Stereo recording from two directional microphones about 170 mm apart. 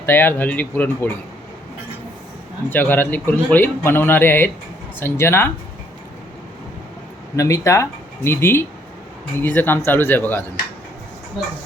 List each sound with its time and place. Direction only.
0.0 s a man's voice: 10° left (ahead or behind)
2.6 s a man's voice: 10° left (ahead or behind)
7.3 s a man's voice: 20° left (ahead or behind)